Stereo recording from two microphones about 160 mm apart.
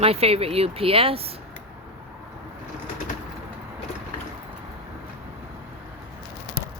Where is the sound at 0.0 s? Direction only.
40° right (ahead or behind).